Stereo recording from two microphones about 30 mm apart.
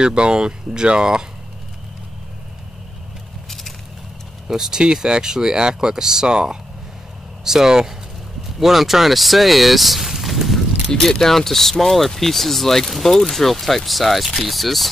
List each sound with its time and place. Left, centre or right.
0.0 s speech: right
3.4 s a sound: centre
4.5 s speech: centre
11.1 s speech: centre